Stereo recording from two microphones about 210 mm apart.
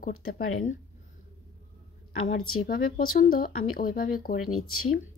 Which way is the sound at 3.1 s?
45° left (ahead or behind).